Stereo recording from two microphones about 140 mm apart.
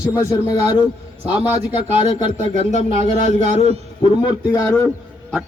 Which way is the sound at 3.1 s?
50° left (ahead or behind).